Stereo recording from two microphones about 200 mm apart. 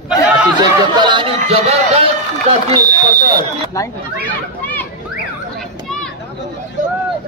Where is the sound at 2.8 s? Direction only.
50° right (ahead or behind).